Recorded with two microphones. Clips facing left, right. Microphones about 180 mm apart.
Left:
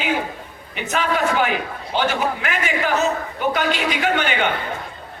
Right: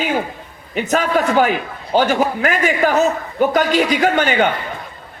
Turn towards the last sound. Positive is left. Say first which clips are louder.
# right 5 dB
turn(degrees=-40)  # may be behind; listen again after turning